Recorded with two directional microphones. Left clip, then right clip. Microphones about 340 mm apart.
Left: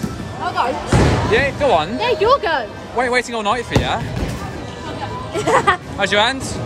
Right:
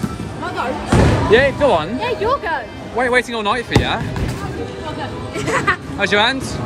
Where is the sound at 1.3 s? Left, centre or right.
Centre.